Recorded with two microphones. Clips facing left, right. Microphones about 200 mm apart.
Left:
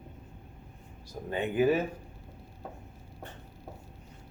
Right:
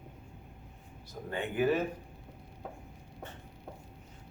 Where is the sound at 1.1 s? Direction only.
20° left (ahead or behind).